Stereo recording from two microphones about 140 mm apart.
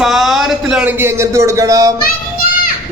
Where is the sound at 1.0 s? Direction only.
20° right (ahead or behind).